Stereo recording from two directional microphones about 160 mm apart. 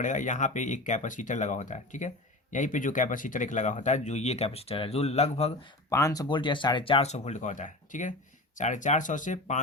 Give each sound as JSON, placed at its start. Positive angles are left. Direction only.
{"t": 0.0, "sound": "speech", "side_deg": 50}
{"t": 5.9, "sound": "speech", "side_deg": 20}